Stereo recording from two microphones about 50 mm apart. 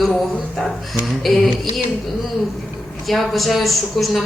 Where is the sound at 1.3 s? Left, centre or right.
Centre.